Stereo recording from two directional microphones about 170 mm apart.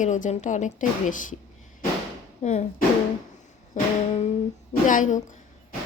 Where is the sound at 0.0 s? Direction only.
45° left (ahead or behind).